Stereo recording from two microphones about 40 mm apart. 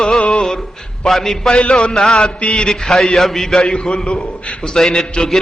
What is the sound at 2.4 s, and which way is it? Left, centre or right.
Speech, left.